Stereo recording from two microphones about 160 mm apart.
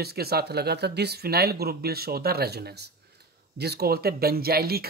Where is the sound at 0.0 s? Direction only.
80° right.